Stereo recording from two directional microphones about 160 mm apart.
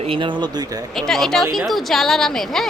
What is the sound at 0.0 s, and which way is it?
Speech, 35° right (ahead or behind).